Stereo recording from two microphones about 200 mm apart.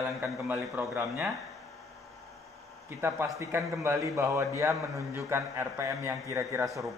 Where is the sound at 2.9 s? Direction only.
10° right (ahead or behind).